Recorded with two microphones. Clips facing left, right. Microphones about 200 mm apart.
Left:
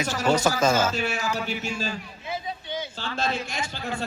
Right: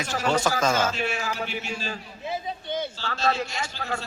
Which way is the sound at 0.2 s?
40° left (ahead or behind).